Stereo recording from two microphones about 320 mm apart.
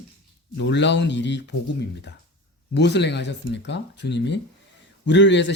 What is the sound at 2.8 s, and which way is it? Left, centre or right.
Speech, left.